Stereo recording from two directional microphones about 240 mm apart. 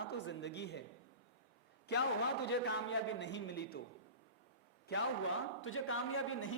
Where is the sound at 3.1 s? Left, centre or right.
Left.